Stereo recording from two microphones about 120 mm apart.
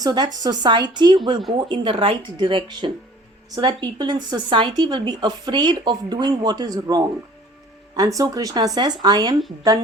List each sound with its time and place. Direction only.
0.0 s speech: 35° right (ahead or behind)